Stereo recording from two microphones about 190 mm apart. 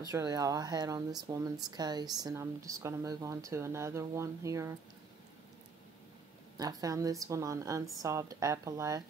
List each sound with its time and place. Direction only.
0.1 s speech: 20° right (ahead or behind)
6.6 s speech: 20° right (ahead or behind)